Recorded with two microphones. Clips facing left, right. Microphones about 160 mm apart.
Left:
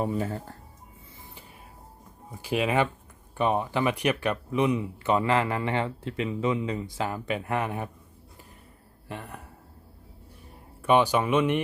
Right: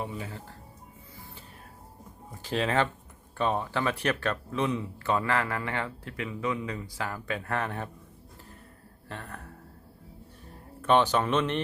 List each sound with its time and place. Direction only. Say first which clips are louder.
0.0 s speech: left 8 dB; 45° left (ahead or behind)
2.3 s speech: left 2 dB; 10° left (ahead or behind)
9.0 s speech: left 2 dB; 15° left (ahead or behind)
10.8 s speech: left 2 dB; 10° left (ahead or behind)